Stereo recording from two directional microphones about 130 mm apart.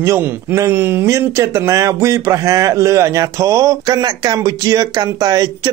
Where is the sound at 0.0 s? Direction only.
20° right (ahead or behind).